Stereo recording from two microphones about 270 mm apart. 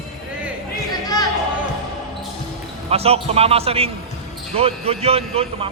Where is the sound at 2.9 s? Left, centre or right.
Right.